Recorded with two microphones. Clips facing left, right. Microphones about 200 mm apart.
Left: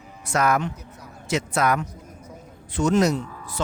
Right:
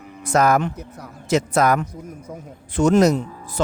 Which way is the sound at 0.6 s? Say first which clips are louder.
Right 4 dB; 60° right (ahead or behind).